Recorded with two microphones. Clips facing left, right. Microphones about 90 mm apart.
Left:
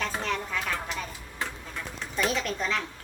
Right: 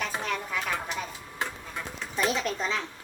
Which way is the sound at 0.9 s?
15° right (ahead or behind).